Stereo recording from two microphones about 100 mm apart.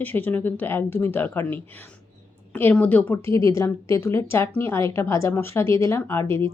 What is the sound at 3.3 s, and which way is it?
Speech, 30° left (ahead or behind).